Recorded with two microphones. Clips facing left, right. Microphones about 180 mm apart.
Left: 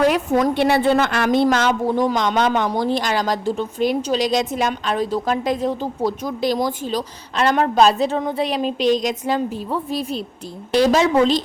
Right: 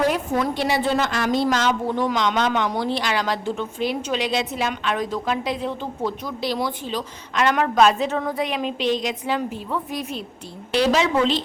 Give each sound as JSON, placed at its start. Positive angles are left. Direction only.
{"t": 0.5, "sound": "a woman's voice", "side_deg": 60}
{"t": 1.9, "sound": "a man's voice", "side_deg": 40}
{"t": 10.7, "sound": "a woman's voice", "side_deg": 45}